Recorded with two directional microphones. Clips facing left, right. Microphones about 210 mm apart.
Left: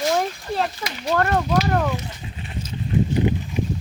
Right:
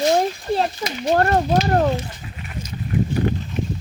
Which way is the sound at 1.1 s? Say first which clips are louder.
Right 3 dB; 35° right (ahead or behind).